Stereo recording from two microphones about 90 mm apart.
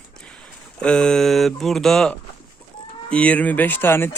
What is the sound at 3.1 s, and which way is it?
Speech, 15° left (ahead or behind).